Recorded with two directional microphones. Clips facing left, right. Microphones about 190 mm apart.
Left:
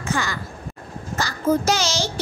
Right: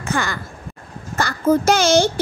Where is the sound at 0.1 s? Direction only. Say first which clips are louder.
Right 3 dB; 55° right (ahead or behind).